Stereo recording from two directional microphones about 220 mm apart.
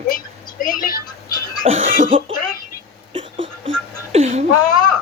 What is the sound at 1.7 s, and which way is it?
Cough, 35° right (ahead or behind).